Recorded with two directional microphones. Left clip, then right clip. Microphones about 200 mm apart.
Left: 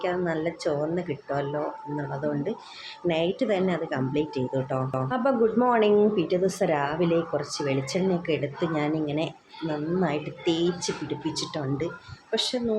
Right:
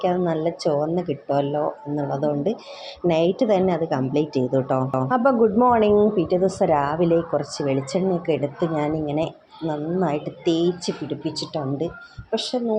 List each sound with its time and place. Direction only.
0.0 s a woman's voice: 20° right (ahead or behind)
5.5 s a woman's voice: 10° right (ahead or behind)